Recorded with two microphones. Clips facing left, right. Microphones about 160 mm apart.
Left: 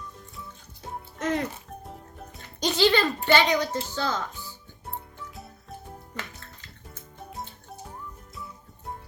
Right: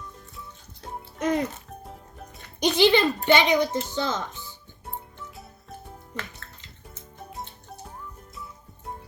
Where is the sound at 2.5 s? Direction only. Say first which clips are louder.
Right 3 dB; 15° right (ahead or behind).